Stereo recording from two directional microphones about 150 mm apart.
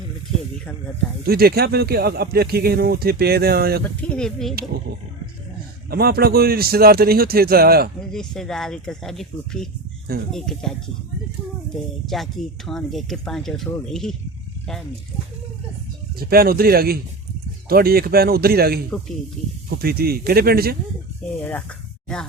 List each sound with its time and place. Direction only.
1.2 s speech: 90° right
3.8 s speech: 10° left (ahead or behind)
5.9 s speech: 90° right
8.1 s speech: 5° left (ahead or behind)
16.1 s speech: 85° right
18.9 s speech: 5° left (ahead or behind)
19.7 s speech: 90° right
21.2 s speech: 5° left (ahead or behind)